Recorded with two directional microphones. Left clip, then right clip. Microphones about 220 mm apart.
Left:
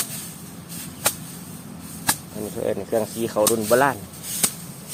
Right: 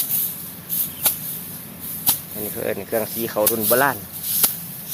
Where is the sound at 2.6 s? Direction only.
5° left (ahead or behind).